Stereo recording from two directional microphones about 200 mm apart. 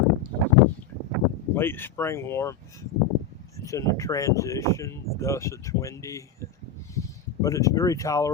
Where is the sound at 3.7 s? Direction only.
15° left (ahead or behind).